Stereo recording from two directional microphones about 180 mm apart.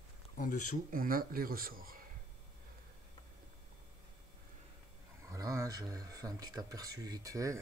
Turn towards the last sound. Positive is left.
turn(degrees=-20)  # may be behind; listen again after turning